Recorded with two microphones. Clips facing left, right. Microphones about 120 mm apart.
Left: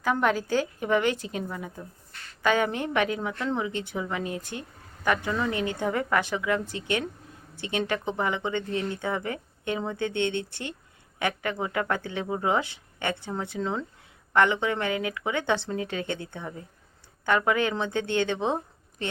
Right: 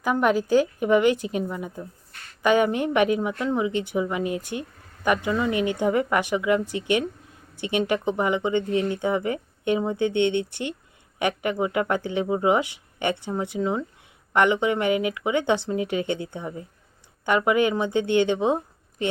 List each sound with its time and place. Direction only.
0.0 s speech: 15° right (ahead or behind)